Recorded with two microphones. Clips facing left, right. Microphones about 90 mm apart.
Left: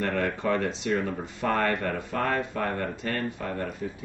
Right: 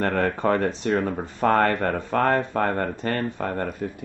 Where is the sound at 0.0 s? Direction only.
50° right (ahead or behind).